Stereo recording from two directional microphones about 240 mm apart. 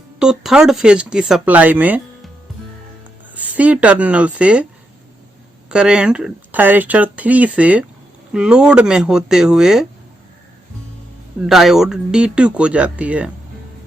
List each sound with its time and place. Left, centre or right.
0.2 s speech: centre
3.3 s speech: centre
5.6 s speech: centre
11.3 s speech: centre